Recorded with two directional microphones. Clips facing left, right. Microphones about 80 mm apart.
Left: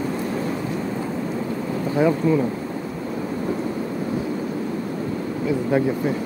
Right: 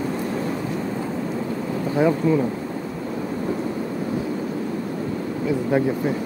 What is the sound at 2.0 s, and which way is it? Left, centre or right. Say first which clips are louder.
Speech: even; right.